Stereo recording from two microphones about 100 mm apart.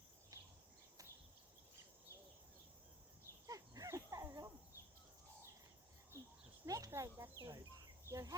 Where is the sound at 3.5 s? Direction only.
35° right (ahead or behind).